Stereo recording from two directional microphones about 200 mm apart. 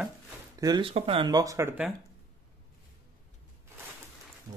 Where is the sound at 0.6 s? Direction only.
25° right (ahead or behind).